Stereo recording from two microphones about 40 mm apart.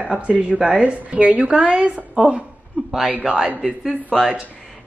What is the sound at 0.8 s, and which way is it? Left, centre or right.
Speech, right.